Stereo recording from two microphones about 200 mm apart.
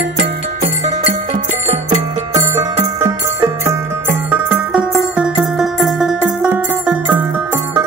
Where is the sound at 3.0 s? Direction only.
15° right (ahead or behind).